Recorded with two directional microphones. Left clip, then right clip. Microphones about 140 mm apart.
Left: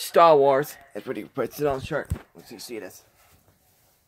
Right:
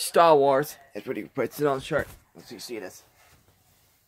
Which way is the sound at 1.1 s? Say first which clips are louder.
Even; 10° right (ahead or behind).